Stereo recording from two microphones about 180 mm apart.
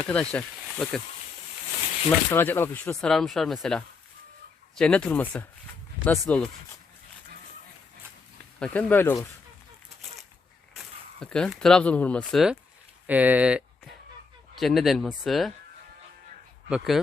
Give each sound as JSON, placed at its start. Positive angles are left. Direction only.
{"t": 0.1, "sound": "speech", "side_deg": 5}
{"t": 2.0, "sound": "speech", "side_deg": 10}
{"t": 8.5, "sound": "speech", "side_deg": 5}
{"t": 10.8, "sound": "speech", "side_deg": 5}
{"t": 16.6, "sound": "speech", "side_deg": -5}